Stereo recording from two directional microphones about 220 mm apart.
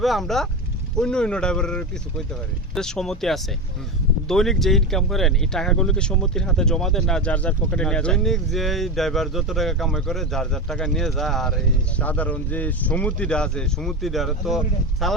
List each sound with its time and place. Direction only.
0.0 s speech: centre (ahead or behind)